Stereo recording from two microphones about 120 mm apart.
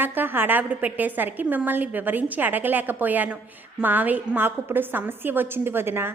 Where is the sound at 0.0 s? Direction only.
15° right (ahead or behind).